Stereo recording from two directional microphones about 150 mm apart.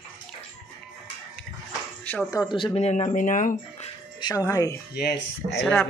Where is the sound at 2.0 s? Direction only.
10° left (ahead or behind).